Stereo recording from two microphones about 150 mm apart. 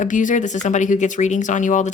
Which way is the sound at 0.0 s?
60° left (ahead or behind).